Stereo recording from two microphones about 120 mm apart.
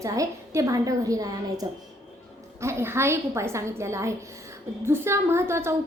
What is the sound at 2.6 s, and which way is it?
A woman's voice, 20° right (ahead or behind).